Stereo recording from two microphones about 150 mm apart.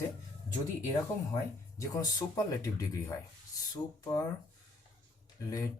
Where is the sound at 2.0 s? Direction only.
25° left (ahead or behind).